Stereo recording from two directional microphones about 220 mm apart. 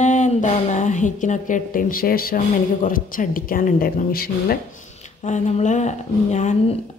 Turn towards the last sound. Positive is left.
turn(degrees=30)  # may be behind; listen again after turning